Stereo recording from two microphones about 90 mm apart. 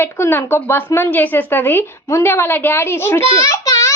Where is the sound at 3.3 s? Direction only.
35° left (ahead or behind).